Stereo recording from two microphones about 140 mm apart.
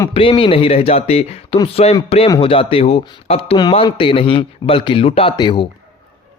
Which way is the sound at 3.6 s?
35° left (ahead or behind).